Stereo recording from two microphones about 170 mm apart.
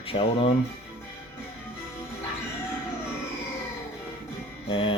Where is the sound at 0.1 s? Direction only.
30° left (ahead or behind).